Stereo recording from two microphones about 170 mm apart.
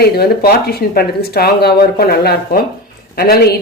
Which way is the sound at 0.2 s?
65° left (ahead or behind).